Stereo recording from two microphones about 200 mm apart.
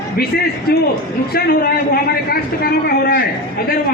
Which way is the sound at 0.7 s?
55° left (ahead or behind).